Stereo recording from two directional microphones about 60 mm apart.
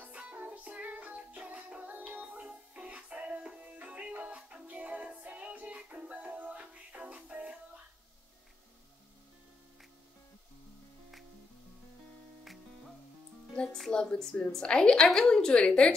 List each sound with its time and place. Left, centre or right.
0.0 s music: right
13.8 s a woman's voice: centre